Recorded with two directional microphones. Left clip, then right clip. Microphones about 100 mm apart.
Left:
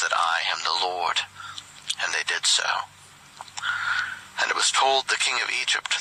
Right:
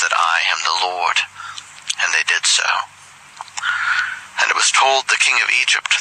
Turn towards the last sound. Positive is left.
turn(degrees=15)  # may be behind; listen again after turning